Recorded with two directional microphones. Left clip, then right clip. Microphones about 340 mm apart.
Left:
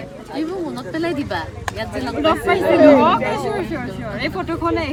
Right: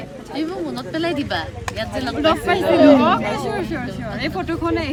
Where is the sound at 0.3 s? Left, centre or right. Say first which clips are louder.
Even; centre.